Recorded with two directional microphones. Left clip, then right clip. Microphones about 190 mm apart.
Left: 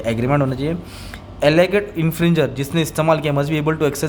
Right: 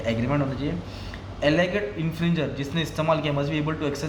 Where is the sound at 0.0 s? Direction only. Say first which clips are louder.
Left 7 dB; 40° left (ahead or behind).